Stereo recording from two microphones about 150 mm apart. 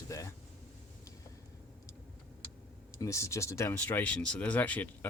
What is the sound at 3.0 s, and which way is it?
Speech, 20° left (ahead or behind).